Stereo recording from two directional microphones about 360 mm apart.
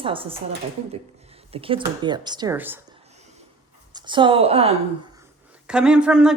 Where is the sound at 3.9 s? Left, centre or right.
Centre.